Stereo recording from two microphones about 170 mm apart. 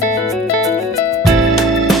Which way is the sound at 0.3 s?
Centre (ahead or behind).